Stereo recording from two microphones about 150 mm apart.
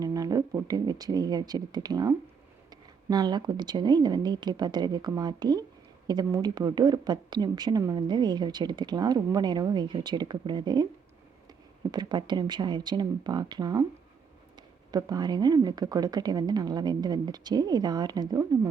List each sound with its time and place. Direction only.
0.0 s speech: 25° right (ahead or behind)
11.9 s speech: 30° right (ahead or behind)
14.9 s speech: 25° right (ahead or behind)